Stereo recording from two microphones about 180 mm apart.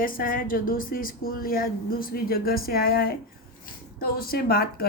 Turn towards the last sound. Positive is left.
turn(degrees=55)  # may be behind; listen again after turning